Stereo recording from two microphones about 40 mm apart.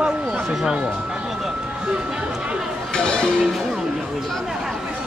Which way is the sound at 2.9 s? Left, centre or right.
Centre.